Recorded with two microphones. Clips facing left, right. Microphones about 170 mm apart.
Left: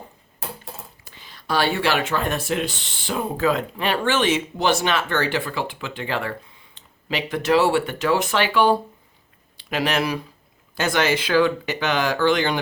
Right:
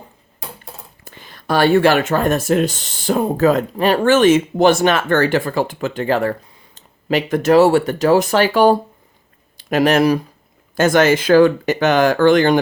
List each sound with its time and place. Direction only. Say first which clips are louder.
1.0 s speech: right 7 dB; 50° right (ahead or behind)